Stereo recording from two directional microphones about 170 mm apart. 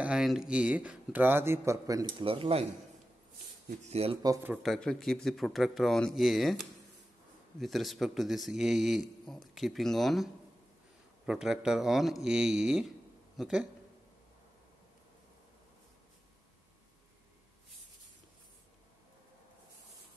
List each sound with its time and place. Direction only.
0.0 s speech: 5° right (ahead or behind); by 2.1 s 20° right (ahead or behind)
2.1 s speech: 30° right (ahead or behind)
3.8 s speech: 35° right (ahead or behind)
4.2 s speech: 20° right (ahead or behind)
4.6 s speech: 5° left (ahead or behind)
7.6 s speech: centre (ahead or behind)